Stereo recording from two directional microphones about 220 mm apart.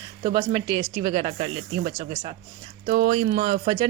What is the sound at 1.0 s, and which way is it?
Speech, 30° right (ahead or behind).